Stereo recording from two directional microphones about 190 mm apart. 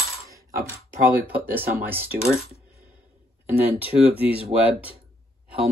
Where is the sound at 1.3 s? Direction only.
10° right (ahead or behind).